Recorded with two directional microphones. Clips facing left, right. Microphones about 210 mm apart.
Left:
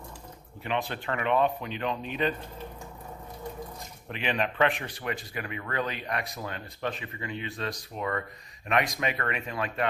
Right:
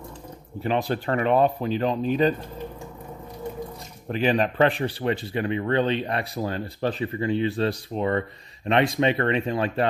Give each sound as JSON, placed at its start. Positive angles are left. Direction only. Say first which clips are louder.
{"t": 0.6, "sound": "speech", "louder": "right 7 dB", "side_deg": -35}
{"t": 4.1, "sound": "speech", "louder": "right 8 dB", "side_deg": -40}